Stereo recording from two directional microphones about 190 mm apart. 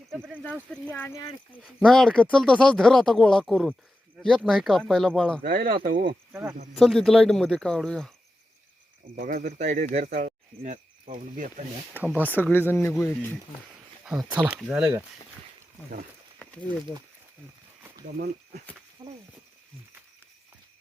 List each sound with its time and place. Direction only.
0.7 s speech: 10° left (ahead or behind)
1.6 s speech: 5° left (ahead or behind)
5.4 s speech: 50° right (ahead or behind)
6.3 s speech: 15° right (ahead or behind)
6.7 s speech: centre (ahead or behind)
9.1 s speech: 50° right (ahead or behind)
11.9 s speech: 10° right (ahead or behind)
12.2 s speech: 10° left (ahead or behind)
14.0 s speech: 5° right (ahead or behind)
19.0 s speech: 25° right (ahead or behind)